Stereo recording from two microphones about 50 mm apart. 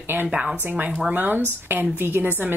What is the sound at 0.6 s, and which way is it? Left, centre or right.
A woman's voice, right.